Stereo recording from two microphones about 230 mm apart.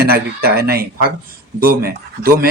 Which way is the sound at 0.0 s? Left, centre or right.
Right.